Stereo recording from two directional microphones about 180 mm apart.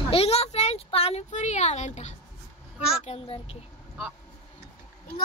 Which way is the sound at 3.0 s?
30° left (ahead or behind).